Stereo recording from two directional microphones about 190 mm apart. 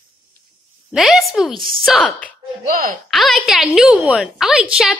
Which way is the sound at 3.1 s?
Centre (ahead or behind).